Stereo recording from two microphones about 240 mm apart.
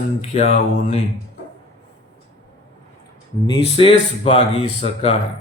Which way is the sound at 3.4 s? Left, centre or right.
Left.